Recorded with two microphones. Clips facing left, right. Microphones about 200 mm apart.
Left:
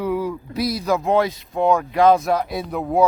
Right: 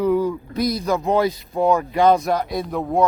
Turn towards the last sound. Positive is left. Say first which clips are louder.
# even
turn(degrees=5)  # may be behind; listen again after turning